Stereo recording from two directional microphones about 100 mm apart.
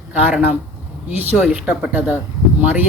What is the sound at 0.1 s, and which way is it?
Speech, 15° right (ahead or behind).